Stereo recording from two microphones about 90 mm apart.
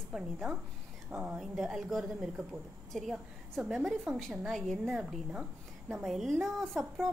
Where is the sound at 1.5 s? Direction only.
5° right (ahead or behind).